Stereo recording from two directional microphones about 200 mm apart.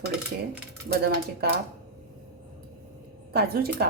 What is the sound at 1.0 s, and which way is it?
Speech, 50° right (ahead or behind).